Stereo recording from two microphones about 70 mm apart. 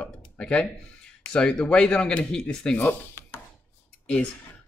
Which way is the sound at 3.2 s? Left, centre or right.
Left.